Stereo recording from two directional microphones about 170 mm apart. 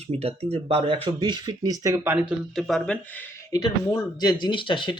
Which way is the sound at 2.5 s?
Centre (ahead or behind).